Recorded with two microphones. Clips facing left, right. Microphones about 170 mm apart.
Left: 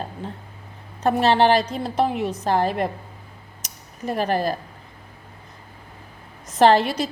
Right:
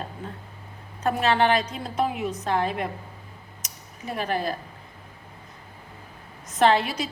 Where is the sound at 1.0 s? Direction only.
35° left (ahead or behind).